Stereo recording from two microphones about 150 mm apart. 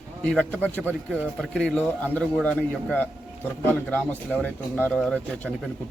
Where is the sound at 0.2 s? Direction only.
5° left (ahead or behind).